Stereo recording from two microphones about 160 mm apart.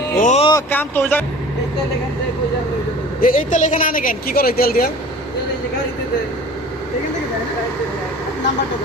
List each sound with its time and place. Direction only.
0.2 s speech: 50° left (ahead or behind)
0.7 s speech: 10° left (ahead or behind)
3.2 s a woman's voice: 55° left (ahead or behind)